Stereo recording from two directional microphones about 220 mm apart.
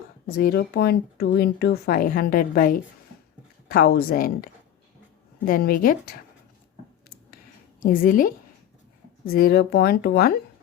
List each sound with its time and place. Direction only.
0.3 s speech: 45° left (ahead or behind)
5.5 s speech: 40° left (ahead or behind)
7.8 s speech: 40° left (ahead or behind)